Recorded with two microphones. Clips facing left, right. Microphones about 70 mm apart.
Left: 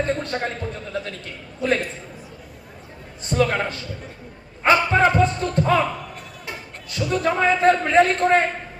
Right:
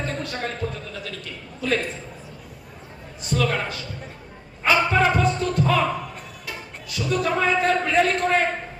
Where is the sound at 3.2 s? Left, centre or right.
Left.